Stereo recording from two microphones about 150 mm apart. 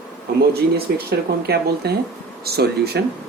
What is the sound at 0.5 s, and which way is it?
Speech, 90° right.